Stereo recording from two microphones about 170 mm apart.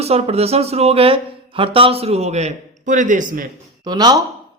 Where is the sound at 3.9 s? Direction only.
25° right (ahead or behind).